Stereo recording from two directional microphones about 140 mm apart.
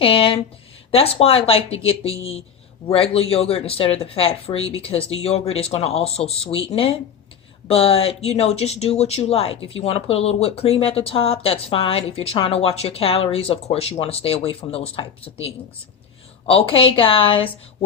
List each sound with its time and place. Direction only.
0.0 s a woman's voice: 40° left (ahead or behind)